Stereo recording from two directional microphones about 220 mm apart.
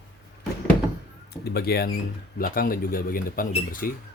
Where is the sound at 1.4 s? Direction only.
45° left (ahead or behind).